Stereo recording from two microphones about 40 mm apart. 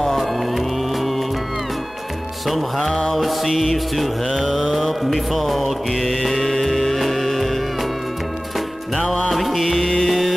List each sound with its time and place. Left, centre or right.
0.0 s music: centre
2.4 s mantra: centre
2.9 s mantra: centre
3.2 s mantra: centre
6.4 s music: centre
9.1 s music: centre